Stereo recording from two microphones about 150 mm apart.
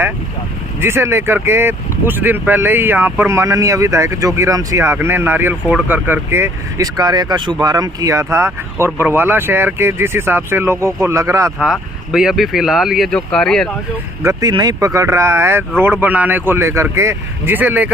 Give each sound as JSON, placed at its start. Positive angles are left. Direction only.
{"t": 0.8, "sound": "speech", "side_deg": -15}
{"t": 11.6, "sound": "speech", "side_deg": -5}
{"t": 14.2, "sound": "speech", "side_deg": -20}